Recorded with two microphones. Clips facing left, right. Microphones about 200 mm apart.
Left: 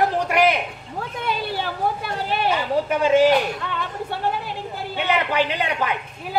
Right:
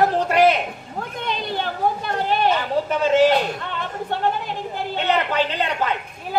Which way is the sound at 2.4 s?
10° left (ahead or behind).